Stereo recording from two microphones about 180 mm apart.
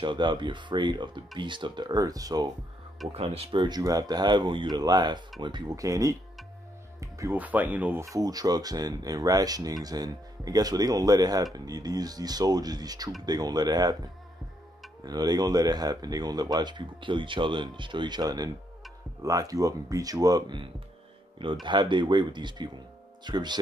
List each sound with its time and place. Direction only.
0.0 s speech: 25° right (ahead or behind)
3.1 s speech: 35° right (ahead or behind)
15.0 s speech: 20° right (ahead or behind)